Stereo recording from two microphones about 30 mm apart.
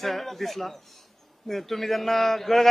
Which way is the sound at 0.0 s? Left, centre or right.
Centre.